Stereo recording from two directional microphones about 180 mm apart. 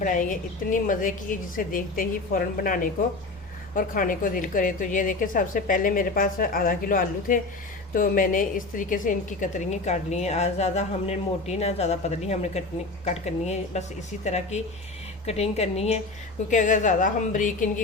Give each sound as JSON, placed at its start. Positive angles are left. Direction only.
{"t": 0.0, "sound": "a woman's voice", "side_deg": 45}